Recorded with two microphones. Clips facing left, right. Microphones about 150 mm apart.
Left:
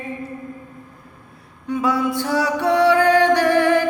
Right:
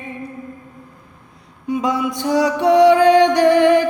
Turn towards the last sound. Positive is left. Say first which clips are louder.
# right 3 dB
turn(degrees=-20)  # may be behind; listen again after turning